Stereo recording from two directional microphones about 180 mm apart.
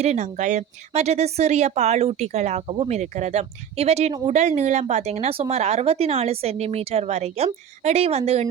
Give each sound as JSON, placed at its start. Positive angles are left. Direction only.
{"t": 0.0, "sound": "speech", "side_deg": -40}